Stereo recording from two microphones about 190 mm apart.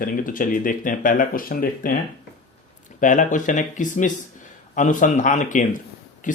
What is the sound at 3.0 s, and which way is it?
Speech, 40° left (ahead or behind).